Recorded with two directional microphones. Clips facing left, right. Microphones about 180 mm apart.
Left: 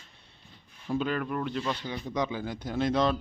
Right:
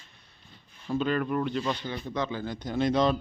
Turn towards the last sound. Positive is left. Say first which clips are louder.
# right 2 dB
turn(degrees=0)  # may be behind; listen again after turning